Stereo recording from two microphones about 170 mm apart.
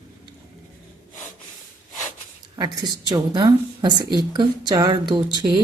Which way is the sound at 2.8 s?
25° right (ahead or behind).